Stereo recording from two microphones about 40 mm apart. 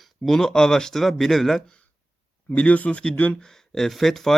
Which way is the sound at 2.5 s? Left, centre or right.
Left.